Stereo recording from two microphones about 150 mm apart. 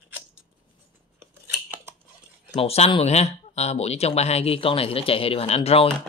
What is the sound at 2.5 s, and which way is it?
Speech, 45° left (ahead or behind).